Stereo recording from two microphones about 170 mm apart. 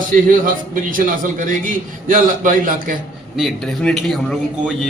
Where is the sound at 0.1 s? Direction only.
55° right (ahead or behind).